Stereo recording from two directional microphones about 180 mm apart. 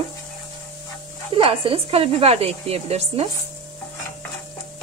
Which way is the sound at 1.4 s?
30° right (ahead or behind).